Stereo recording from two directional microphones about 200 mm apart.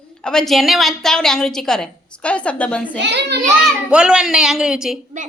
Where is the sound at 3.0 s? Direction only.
60° right (ahead or behind).